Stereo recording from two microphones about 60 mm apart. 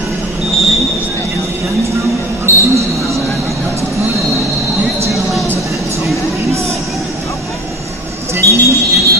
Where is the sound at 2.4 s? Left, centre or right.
Right.